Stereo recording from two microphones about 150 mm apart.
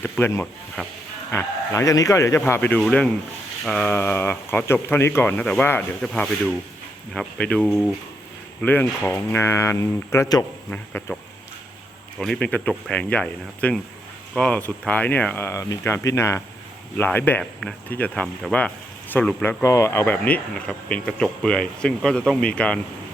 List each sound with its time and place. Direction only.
0.0 s speech: 15° left (ahead or behind)
10.7 s speech: 10° left (ahead or behind)
12.2 s speech: 5° left (ahead or behind)